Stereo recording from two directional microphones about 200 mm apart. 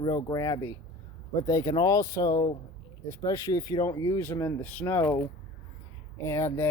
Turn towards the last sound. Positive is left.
turn(degrees=15)  # may be behind; listen again after turning